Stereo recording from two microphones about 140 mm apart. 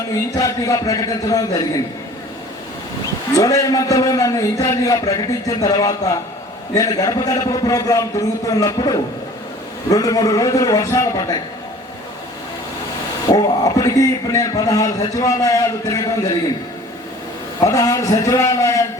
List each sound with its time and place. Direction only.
0.3 s a man's voice: 25° left (ahead or behind)
3.3 s a man's voice: 25° left (ahead or behind)
13.3 s a man's voice: 25° left (ahead or behind)
17.6 s a man's voice: 25° left (ahead or behind)